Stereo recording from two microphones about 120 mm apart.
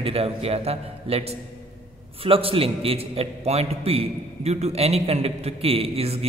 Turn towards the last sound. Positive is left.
turn(degrees=-55)  # may be behind; listen again after turning